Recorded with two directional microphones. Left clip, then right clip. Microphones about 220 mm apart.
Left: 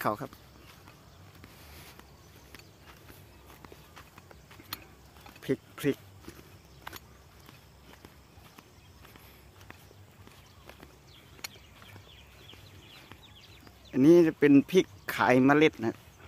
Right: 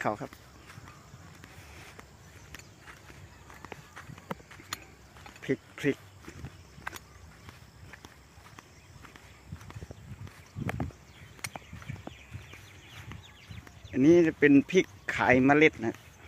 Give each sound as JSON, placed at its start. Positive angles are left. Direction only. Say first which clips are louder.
{"t": 0.0, "sound": "speech", "louder": "left 1 dB", "side_deg": 10}
{"t": 5.4, "sound": "a sound", "louder": "even", "side_deg": 10}
{"t": 13.9, "sound": "speech", "louder": "left 1 dB", "side_deg": 20}